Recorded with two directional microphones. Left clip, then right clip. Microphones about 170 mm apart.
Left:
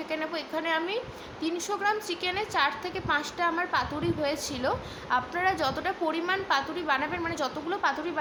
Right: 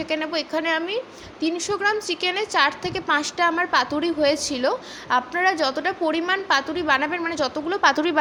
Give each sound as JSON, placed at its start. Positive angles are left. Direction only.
{"t": 0.1, "sound": "a woman's voice", "side_deg": -40}